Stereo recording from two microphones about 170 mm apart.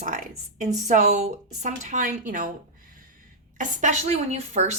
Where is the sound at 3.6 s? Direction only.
45° right (ahead or behind).